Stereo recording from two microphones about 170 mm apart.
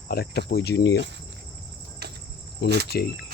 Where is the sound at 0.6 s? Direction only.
80° left.